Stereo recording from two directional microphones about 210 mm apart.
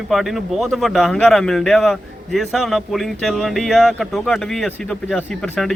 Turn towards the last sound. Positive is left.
turn(degrees=5)  # may be behind; listen again after turning